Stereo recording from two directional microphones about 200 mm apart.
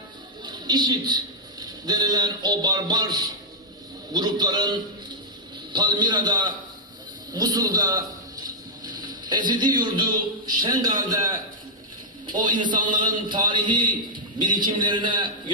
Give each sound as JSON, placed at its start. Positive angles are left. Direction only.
{"t": 0.4, "sound": "a man's voice", "side_deg": -20}
{"t": 8.4, "sound": "a sound", "side_deg": -20}
{"t": 10.6, "sound": "a man's voice", "side_deg": -20}